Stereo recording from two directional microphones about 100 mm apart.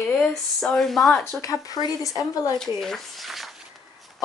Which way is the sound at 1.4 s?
35° left (ahead or behind).